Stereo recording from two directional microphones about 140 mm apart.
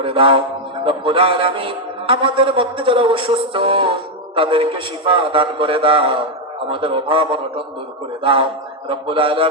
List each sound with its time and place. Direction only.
0.0 s a man's voice: 40° right (ahead or behind)